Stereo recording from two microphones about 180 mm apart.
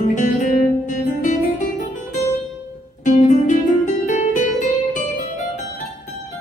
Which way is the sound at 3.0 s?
45° left (ahead or behind).